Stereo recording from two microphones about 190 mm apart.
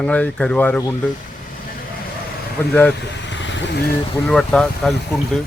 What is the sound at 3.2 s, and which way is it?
Vehicle, 75° left (ahead or behind).